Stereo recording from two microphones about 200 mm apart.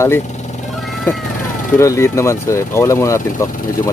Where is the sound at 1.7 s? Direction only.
15° left (ahead or behind).